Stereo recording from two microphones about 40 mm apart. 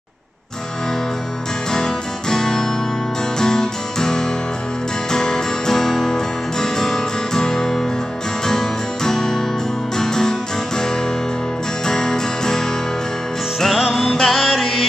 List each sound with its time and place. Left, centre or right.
1.7 s music: centre
11.8 s music: centre